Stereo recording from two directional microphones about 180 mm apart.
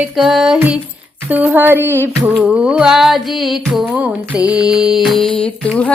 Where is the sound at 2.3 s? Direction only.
5° right (ahead or behind).